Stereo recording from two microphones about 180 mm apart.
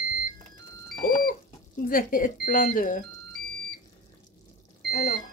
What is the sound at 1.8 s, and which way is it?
Speech, 50° left (ahead or behind).